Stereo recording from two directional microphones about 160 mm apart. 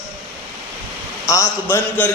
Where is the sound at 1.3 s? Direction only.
20° left (ahead or behind).